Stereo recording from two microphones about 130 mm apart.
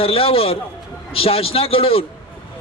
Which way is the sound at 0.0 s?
45° left (ahead or behind).